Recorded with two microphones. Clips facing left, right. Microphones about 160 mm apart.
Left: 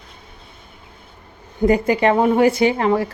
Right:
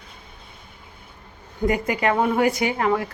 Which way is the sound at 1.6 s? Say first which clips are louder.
Left 6 dB; 30° left (ahead or behind).